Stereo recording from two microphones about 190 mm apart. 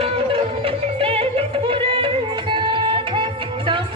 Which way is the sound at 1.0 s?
30° right (ahead or behind).